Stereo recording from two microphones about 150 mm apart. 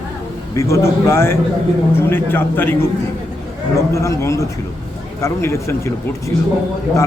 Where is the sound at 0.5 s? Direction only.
20° left (ahead or behind).